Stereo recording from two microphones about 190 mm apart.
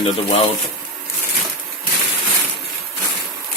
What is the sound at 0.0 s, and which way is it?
Speech, 30° left (ahead or behind).